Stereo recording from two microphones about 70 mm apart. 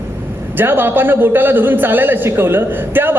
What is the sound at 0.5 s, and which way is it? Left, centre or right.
A man's voice, right.